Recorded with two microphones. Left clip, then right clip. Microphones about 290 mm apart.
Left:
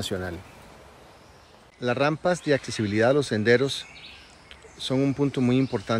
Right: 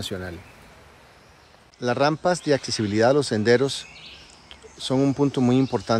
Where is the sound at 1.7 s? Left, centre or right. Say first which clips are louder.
Right 3 dB; centre.